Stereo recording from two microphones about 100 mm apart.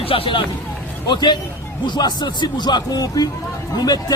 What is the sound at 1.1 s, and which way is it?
Speech, 45° left (ahead or behind).